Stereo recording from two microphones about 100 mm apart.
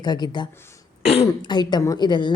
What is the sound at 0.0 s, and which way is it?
Speech, 45° left (ahead or behind).